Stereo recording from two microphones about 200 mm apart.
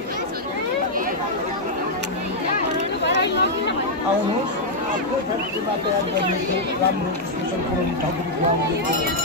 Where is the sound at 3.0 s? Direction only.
60° left (ahead or behind).